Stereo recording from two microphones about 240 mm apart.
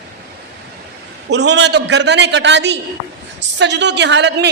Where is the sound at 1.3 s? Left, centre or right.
Right.